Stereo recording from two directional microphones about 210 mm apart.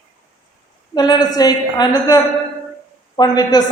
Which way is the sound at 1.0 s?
20° left (ahead or behind).